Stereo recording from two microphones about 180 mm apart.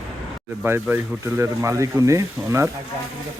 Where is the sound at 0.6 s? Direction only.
15° right (ahead or behind).